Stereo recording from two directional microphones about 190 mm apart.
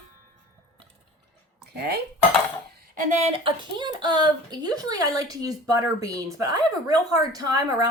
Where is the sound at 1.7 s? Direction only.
55° right (ahead or behind).